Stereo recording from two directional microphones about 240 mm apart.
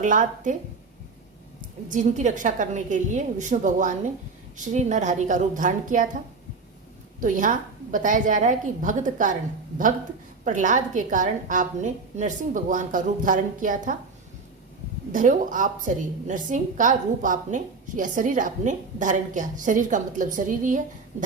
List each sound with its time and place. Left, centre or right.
0.0 s a woman's voice: right
1.9 s a woman's voice: right
7.2 s a woman's voice: right
10.4 s a woman's voice: right
15.1 s a woman's voice: right